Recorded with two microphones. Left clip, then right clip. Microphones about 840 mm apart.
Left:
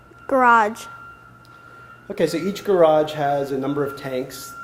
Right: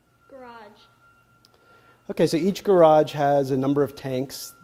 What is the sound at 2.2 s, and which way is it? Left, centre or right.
Speech, right.